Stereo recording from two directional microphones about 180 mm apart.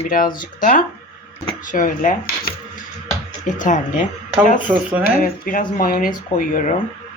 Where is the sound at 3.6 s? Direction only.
45° left (ahead or behind).